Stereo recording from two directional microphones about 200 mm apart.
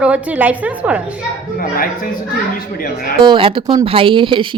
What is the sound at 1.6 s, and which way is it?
Speech, 45° left (ahead or behind).